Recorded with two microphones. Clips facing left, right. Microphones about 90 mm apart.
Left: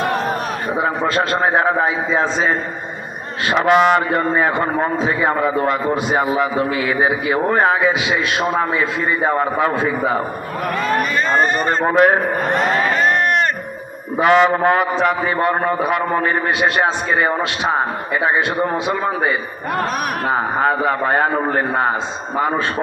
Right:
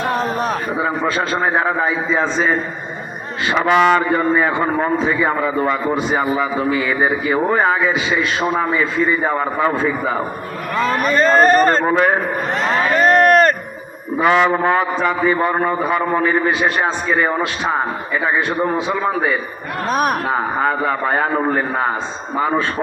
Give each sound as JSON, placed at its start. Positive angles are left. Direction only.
{"t": 1.4, "sound": "a man's voice", "side_deg": 5}
{"t": 3.5, "sound": "a man's voice", "side_deg": 5}
{"t": 11.0, "sound": "speech", "side_deg": -40}
{"t": 11.4, "sound": "speech", "side_deg": -50}
{"t": 11.7, "sound": "a man's voice", "side_deg": 10}
{"t": 13.1, "sound": "a sound", "side_deg": -40}
{"t": 14.2, "sound": "a man's voice", "side_deg": 0}
{"t": 19.9, "sound": "speech", "side_deg": -35}
{"t": 20.2, "sound": "a man's voice", "side_deg": 0}